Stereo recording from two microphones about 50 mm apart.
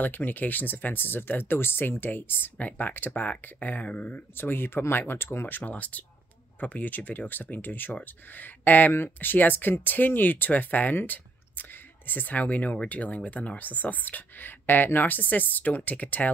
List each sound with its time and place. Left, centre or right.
0.0 s speech: left
2.5 s speech: left
3.5 s speech: left
4.4 s speech: left
5.7 s speech: left